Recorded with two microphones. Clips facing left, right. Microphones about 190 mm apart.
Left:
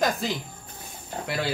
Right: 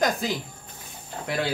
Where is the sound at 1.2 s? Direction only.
35° left (ahead or behind).